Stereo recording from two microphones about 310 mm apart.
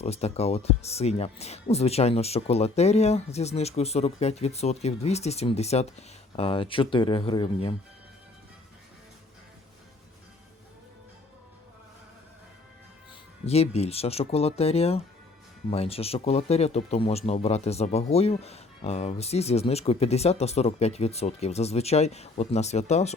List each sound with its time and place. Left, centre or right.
0.0 s speech: left
13.4 s speech: centre